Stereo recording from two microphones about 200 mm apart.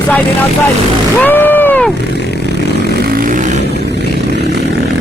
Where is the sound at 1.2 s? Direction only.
10° left (ahead or behind).